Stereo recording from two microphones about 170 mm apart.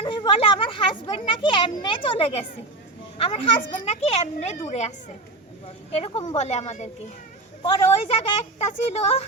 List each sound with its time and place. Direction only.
0.0 s a woman's voice: 30° left (ahead or behind)
5.9 s a woman's voice: 35° left (ahead or behind)